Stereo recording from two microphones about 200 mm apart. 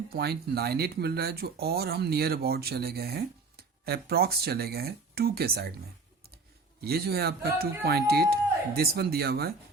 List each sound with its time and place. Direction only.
0.1 s speech: 50° right (ahead or behind)
6.8 s speech: 50° right (ahead or behind)